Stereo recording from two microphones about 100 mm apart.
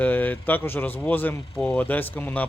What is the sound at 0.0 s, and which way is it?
Speech, 15° left (ahead or behind).